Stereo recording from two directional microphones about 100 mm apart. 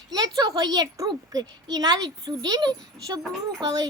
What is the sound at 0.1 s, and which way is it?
A woman's voice, 40° right (ahead or behind).